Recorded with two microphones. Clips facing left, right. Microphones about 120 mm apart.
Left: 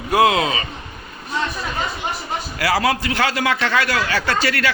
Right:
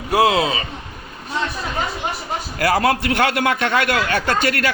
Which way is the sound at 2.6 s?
50° right (ahead or behind).